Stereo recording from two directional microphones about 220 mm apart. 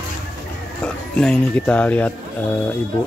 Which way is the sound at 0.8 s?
5° left (ahead or behind).